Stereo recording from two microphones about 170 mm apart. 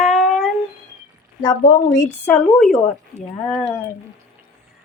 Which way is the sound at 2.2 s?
5° left (ahead or behind).